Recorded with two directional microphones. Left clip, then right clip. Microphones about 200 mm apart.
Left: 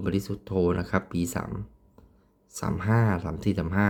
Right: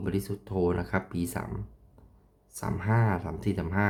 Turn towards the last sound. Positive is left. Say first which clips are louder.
# left 2 dB
turn(degrees=20)  # may be behind; listen again after turning